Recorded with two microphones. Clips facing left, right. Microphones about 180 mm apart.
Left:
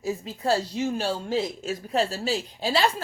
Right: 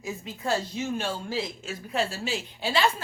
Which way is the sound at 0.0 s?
35° left (ahead or behind).